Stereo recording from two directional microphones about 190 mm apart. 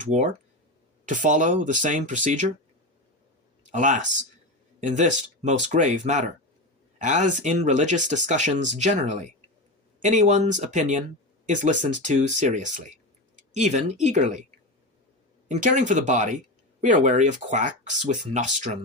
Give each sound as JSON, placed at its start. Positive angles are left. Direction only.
{"t": 0.0, "sound": "speech", "side_deg": -40}
{"t": 3.7, "sound": "speech", "side_deg": -40}
{"t": 13.3, "sound": "tick-tock", "side_deg": -35}
{"t": 14.0, "sound": "speech", "side_deg": -40}
{"t": 15.4, "sound": "speech", "side_deg": -40}